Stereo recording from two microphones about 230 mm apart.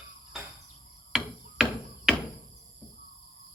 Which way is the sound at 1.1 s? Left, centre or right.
Centre.